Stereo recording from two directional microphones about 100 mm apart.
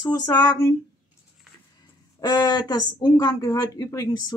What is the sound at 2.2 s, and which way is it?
Speech, 40° left (ahead or behind).